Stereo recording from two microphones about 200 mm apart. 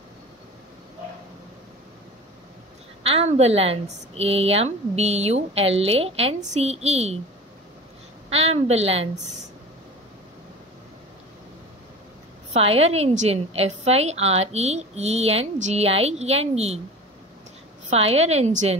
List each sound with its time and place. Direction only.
3.0 s a woman's voice: 30° right (ahead or behind)
8.3 s a woman's voice: 30° right (ahead or behind)
12.5 s a woman's voice: 30° right (ahead or behind)
17.8 s a woman's voice: 30° right (ahead or behind)